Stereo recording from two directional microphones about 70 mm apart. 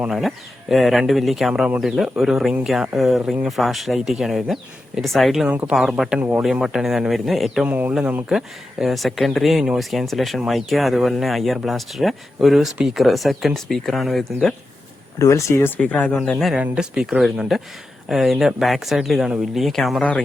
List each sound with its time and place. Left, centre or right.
0.1 s speech: centre
6.1 s speech: right
6.4 s speech: centre
15.2 s speech: left
15.8 s speech: centre
16.6 s speech: centre
20.0 s speech: centre